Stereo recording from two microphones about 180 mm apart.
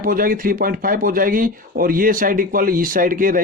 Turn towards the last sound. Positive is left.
turn(degrees=-50)  # may be behind; listen again after turning